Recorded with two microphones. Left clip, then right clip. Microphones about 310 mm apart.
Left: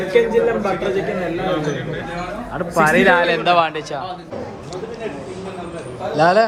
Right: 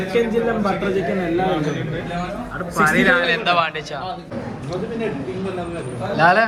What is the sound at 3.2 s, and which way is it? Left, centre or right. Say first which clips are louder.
Speech: left 2 dB; centre.